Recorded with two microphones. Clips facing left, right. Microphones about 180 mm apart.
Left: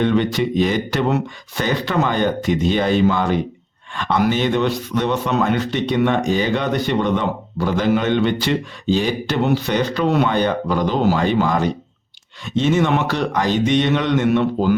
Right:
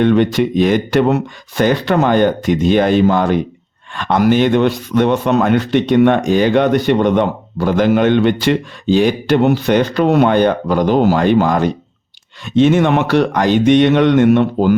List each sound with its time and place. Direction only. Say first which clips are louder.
0.0 s a man's voice: right 5 dB; 55° right (ahead or behind)